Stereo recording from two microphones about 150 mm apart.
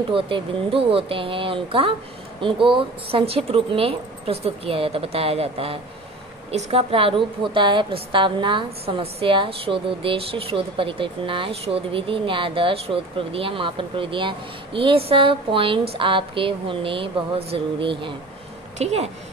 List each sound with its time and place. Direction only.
0.1 s a woman's voice: 35° right (ahead or behind)
18.8 s a woman's voice: 45° right (ahead or behind)